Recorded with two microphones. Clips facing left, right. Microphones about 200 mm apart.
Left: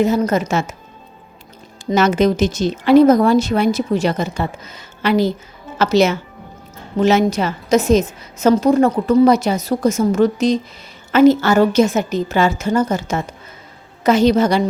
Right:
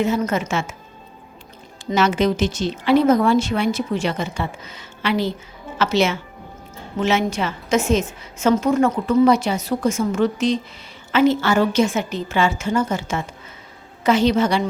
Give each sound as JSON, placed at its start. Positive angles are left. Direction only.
{"t": 0.0, "sound": "a woman's voice", "side_deg": 40}
{"t": 1.9, "sound": "a woman's voice", "side_deg": 45}